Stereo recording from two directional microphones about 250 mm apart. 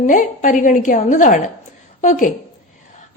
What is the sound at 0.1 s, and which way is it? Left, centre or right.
A woman's voice, left.